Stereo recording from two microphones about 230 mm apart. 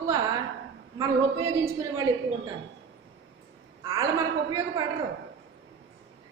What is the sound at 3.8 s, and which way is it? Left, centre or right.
A woman's voice, centre.